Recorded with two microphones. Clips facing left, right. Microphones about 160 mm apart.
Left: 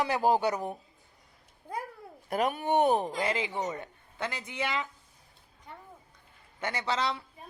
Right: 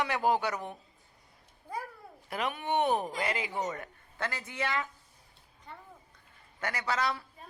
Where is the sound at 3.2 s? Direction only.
25° left (ahead or behind).